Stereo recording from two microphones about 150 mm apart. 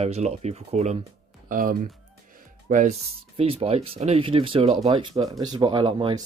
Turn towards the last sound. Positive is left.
turn(degrees=-30)  # may be behind; listen again after turning